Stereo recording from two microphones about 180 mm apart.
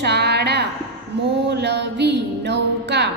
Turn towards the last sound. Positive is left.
turn(degrees=-70)  # may be behind; listen again after turning